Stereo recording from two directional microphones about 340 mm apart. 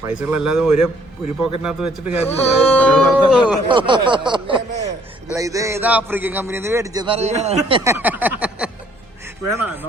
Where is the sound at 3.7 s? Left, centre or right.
Centre.